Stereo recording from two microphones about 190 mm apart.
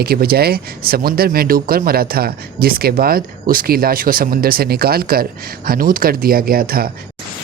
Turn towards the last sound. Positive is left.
turn(degrees=-50)  # may be behind; listen again after turning